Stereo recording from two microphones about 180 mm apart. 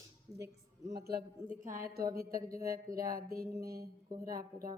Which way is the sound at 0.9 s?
60° right (ahead or behind).